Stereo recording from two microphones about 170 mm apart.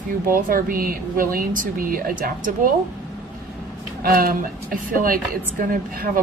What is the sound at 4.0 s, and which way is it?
A woman's voice, 60° right (ahead or behind).